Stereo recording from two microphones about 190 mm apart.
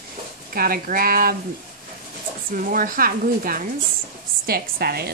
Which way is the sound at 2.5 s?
45° right (ahead or behind).